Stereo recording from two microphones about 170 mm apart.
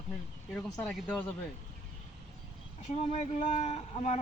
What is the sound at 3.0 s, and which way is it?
Speech, 35° left (ahead or behind).